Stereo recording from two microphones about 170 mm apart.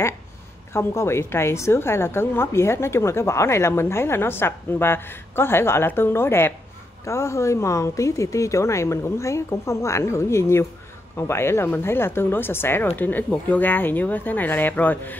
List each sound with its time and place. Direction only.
0.7 s a woman's voice: 15° left (ahead or behind)